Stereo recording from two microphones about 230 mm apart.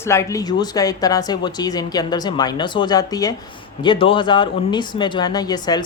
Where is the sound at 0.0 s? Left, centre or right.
Centre.